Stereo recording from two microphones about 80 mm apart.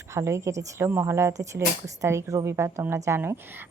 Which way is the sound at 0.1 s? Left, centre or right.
Right.